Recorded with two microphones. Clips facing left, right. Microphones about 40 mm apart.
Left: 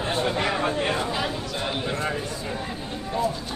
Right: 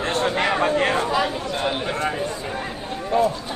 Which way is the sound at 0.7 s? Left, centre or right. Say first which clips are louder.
Right 5 dB; right.